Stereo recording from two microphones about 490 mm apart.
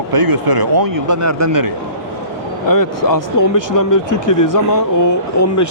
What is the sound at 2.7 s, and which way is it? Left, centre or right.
Speech, left.